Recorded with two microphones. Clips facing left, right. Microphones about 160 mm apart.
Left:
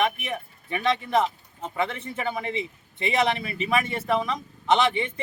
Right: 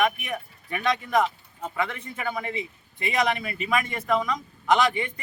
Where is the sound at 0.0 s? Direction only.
25° left (ahead or behind).